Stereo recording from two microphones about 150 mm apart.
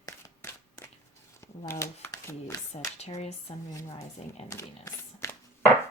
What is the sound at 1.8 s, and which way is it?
Speech, 20° left (ahead or behind).